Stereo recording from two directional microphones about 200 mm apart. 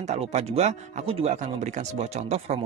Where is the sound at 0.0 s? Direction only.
35° right (ahead or behind).